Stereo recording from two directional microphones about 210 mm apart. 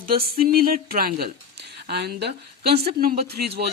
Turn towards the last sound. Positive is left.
turn(degrees=-50)  # may be behind; listen again after turning